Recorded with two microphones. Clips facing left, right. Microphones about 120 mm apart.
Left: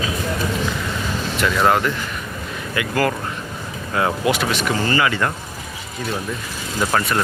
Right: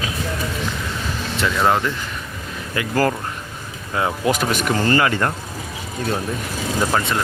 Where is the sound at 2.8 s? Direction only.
35° right (ahead or behind).